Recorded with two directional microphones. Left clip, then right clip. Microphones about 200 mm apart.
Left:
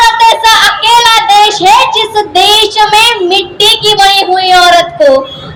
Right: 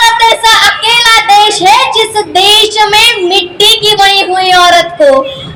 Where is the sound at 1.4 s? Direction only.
50° right (ahead or behind).